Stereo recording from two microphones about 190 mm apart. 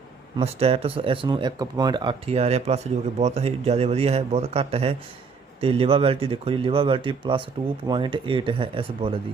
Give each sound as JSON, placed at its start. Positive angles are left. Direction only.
{"t": 0.3, "sound": "speech", "side_deg": -30}